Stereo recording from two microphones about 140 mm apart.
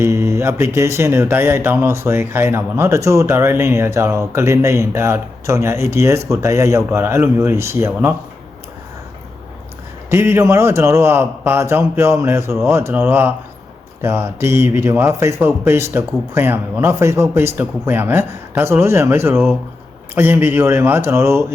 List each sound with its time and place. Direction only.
0.0 s speech: 20° right (ahead or behind)
10.1 s speech: 15° right (ahead or behind)